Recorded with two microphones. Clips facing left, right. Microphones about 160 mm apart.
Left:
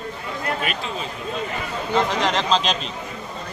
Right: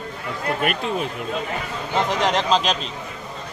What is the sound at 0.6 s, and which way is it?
Speech, 55° right (ahead or behind).